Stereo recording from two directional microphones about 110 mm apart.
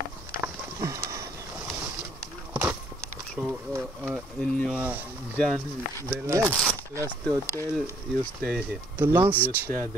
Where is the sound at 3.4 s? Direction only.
10° right (ahead or behind).